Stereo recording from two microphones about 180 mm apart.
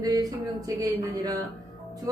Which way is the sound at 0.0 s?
20° right (ahead or behind).